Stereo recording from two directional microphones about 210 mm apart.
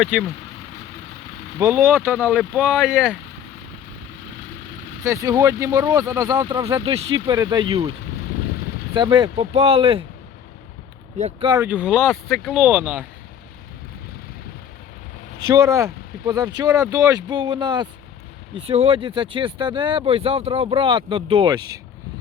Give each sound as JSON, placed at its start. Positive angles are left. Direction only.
{"t": 0.0, "sound": "speech", "side_deg": 0}
{"t": 1.5, "sound": "speech", "side_deg": -15}
{"t": 5.0, "sound": "speech", "side_deg": -15}
{"t": 9.0, "sound": "speech", "side_deg": -20}
{"t": 11.2, "sound": "speech", "side_deg": -25}
{"t": 11.5, "sound": "speech", "side_deg": -10}
{"t": 15.7, "sound": "speech", "side_deg": -15}